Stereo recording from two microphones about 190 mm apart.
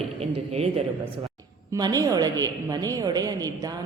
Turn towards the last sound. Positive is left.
turn(degrees=-20)  # may be behind; listen again after turning